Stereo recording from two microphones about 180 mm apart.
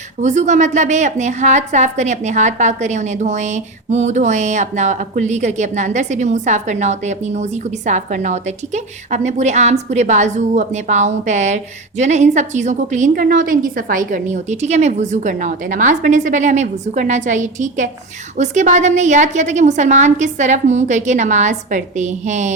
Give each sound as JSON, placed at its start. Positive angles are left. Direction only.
{"t": 0.2, "sound": "a woman's voice", "side_deg": -40}